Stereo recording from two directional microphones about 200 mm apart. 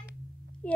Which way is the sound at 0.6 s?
5° left (ahead or behind).